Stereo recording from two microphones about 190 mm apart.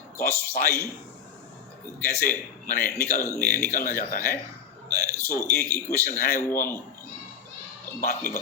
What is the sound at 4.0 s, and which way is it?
Speech, 45° left (ahead or behind).